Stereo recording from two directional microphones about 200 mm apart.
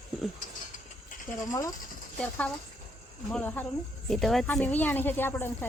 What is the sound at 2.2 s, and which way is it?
Speech, 5° left (ahead or behind).